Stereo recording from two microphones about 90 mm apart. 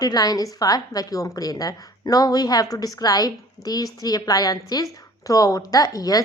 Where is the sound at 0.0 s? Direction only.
45° left (ahead or behind).